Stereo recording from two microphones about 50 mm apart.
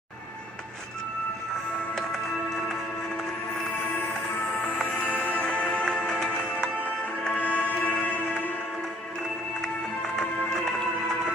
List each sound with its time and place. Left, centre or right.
4.8 s music: left
7.3 s music: left
10.1 s music: centre